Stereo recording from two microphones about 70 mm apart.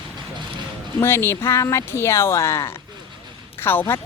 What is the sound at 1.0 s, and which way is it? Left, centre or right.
Speech, left.